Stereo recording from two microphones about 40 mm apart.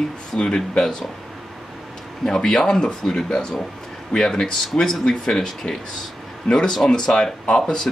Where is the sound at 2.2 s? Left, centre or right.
Centre.